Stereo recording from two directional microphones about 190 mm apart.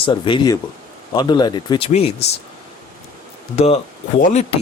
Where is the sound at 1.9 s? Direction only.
35° left (ahead or behind).